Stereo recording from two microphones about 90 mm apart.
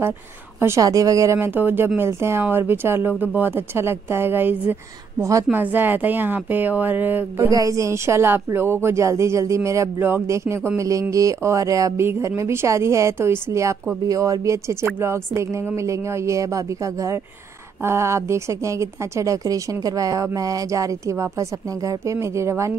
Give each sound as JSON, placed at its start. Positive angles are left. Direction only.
{"t": 0.6, "sound": "a woman's voice", "side_deg": -30}
{"t": 0.8, "sound": "a woman's voice", "side_deg": -40}
{"t": 1.5, "sound": "speech", "side_deg": -20}
{"t": 7.3, "sound": "a woman's voice", "side_deg": -40}